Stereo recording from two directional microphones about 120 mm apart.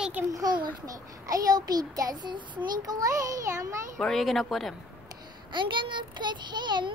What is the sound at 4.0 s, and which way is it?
Speech, 5° left (ahead or behind).